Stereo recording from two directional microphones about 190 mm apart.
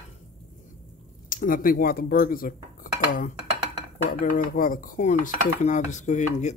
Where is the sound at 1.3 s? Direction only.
45° left (ahead or behind).